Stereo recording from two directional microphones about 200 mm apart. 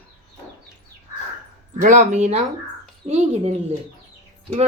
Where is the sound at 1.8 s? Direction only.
35° right (ahead or behind).